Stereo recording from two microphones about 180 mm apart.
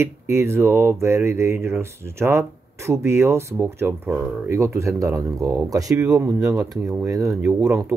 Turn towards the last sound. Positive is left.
turn(degrees=-10)  # may be behind; listen again after turning